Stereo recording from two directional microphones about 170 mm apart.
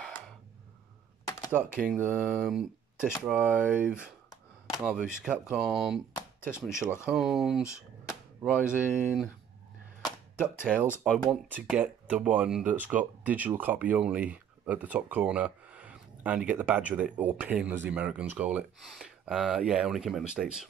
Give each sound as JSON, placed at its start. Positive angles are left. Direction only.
{"t": 1.5, "sound": "speech", "side_deg": -5}
{"t": 2.0, "sound": "speech", "side_deg": 10}
{"t": 6.1, "sound": "chopping", "side_deg": 15}
{"t": 6.6, "sound": "speech", "side_deg": -5}
{"t": 10.6, "sound": "speech", "side_deg": -5}
{"t": 10.9, "sound": "speech", "side_deg": 15}
{"t": 11.2, "sound": "speech", "side_deg": -5}